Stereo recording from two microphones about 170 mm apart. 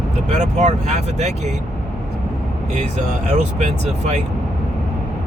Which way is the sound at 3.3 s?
40° right (ahead or behind).